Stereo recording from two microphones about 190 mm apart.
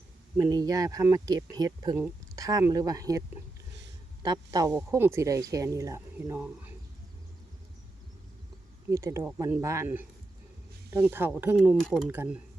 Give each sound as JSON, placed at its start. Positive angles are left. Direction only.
{"t": 0.3, "sound": "speech", "side_deg": -20}
{"t": 8.9, "sound": "speech", "side_deg": -15}
{"t": 11.2, "sound": "speech", "side_deg": -10}
{"t": 11.5, "sound": "speech", "side_deg": 0}